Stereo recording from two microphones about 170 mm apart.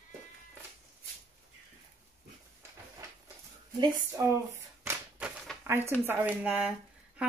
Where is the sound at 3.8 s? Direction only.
25° right (ahead or behind).